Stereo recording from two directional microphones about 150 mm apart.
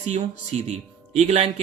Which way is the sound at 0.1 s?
50° right (ahead or behind).